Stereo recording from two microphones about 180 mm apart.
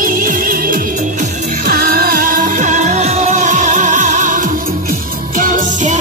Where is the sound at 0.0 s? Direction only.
50° right (ahead or behind).